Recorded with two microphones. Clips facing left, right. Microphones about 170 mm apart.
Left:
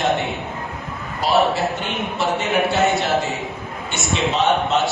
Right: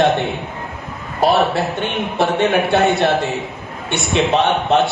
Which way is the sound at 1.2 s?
60° right (ahead or behind).